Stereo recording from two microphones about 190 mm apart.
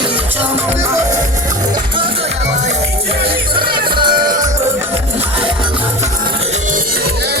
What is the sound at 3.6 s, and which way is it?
Music, 50° right (ahead or behind).